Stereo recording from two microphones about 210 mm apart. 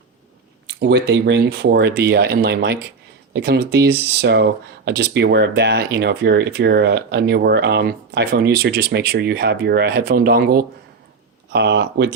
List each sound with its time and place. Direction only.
0.8 s speech: 55° right (ahead or behind)